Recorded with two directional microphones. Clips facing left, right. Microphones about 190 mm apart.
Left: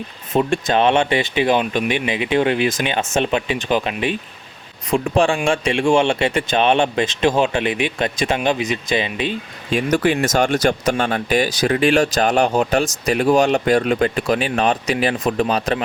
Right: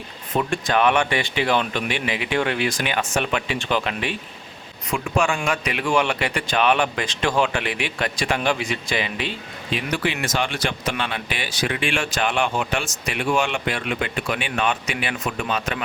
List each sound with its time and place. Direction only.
0.3 s a man's voice: 25° left (ahead or behind)
4.9 s a man's voice: 35° left (ahead or behind)
9.6 s speech: 45° left (ahead or behind)